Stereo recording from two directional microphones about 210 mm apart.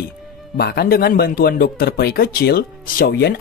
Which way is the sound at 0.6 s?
50° left (ahead or behind).